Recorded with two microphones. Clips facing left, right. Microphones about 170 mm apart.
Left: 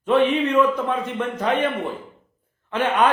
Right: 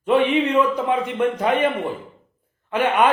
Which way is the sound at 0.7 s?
15° right (ahead or behind).